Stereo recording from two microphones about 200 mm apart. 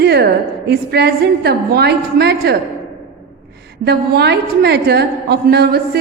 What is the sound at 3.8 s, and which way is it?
A woman's voice, 55° right (ahead or behind).